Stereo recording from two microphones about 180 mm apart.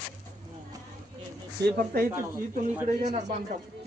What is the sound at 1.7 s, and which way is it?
Speech, 55° right (ahead or behind).